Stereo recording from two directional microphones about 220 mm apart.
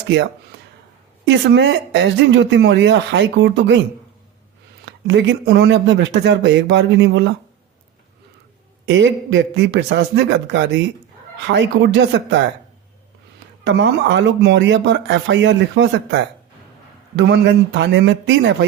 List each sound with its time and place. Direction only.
1.2 s speech: 50° right (ahead or behind)
5.0 s speech: 50° right (ahead or behind)
8.9 s speech: 55° right (ahead or behind)
13.7 s speech: 55° right (ahead or behind)